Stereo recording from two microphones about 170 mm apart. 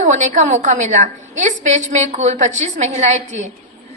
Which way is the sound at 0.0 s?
45° right (ahead or behind).